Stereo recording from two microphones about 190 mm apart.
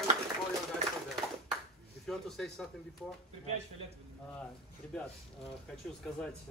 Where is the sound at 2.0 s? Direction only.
Centre (ahead or behind).